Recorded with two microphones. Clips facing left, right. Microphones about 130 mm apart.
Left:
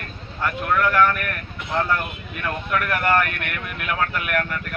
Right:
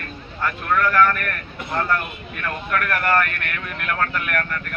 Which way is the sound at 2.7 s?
10° left (ahead or behind).